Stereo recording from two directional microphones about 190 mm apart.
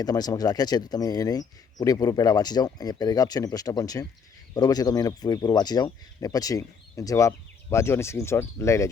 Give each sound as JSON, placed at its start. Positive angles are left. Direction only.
{"t": 0.0, "sound": "speech", "side_deg": 20}